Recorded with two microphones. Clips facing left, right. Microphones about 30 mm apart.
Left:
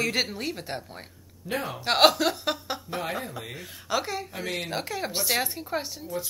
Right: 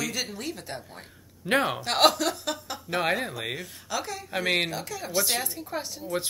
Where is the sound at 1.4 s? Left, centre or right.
Right.